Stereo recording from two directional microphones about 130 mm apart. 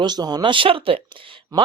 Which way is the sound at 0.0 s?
30° right (ahead or behind).